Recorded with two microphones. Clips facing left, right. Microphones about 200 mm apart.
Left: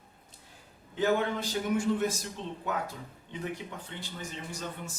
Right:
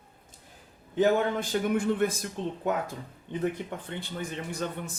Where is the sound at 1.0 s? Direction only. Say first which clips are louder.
Right 4 dB; 55° right (ahead or behind).